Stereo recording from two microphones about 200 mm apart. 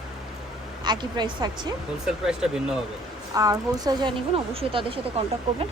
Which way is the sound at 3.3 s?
15° right (ahead or behind).